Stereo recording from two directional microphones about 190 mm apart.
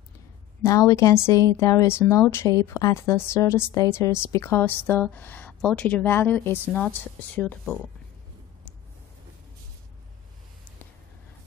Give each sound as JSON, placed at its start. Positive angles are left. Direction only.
{"t": 0.6, "sound": "a woman's voice", "side_deg": 15}